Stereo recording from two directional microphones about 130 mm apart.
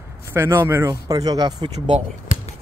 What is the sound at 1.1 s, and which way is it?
Speech, 30° right (ahead or behind).